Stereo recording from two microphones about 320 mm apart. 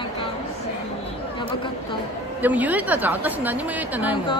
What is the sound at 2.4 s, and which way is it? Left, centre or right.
A woman's voice, centre.